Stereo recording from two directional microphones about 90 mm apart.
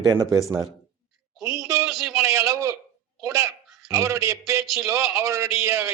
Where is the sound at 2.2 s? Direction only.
35° right (ahead or behind).